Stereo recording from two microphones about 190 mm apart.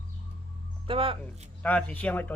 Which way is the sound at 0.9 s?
30° right (ahead or behind).